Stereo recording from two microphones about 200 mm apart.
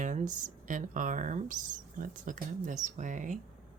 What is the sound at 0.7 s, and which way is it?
Speech, 40° right (ahead or behind).